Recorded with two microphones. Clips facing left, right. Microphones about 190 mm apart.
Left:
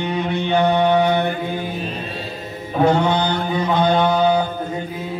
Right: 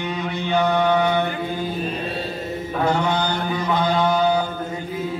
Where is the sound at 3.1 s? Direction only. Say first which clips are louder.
Left 3 dB; 60° left (ahead or behind).